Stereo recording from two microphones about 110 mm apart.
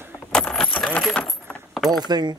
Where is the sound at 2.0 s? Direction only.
40° right (ahead or behind).